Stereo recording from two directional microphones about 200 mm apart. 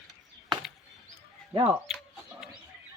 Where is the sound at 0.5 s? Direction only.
25° right (ahead or behind).